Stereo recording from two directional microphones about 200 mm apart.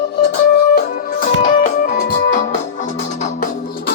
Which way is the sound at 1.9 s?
50° left (ahead or behind).